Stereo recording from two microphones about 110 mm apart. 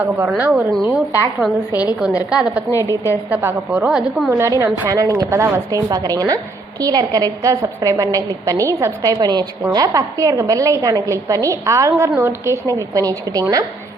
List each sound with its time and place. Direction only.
0.0 s a woman's voice: 15° right (ahead or behind)
1.4 s a woman's voice: centre (ahead or behind)
2.8 s a woman's voice: 30° right (ahead or behind)
3.7 s a woman's voice: 10° right (ahead or behind)
4.3 s a woman's voice: 25° right (ahead or behind)
4.9 s a woman's voice: 30° right (ahead or behind)